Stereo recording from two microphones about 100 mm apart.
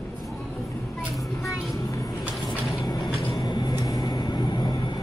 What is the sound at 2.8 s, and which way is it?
Vehicle, 40° left (ahead or behind).